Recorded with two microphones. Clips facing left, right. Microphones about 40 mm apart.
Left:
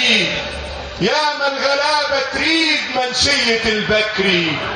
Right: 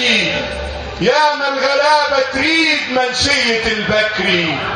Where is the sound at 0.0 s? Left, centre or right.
Right.